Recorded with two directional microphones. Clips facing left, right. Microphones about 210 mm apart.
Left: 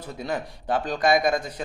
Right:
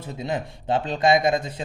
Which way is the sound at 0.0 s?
20° right (ahead or behind).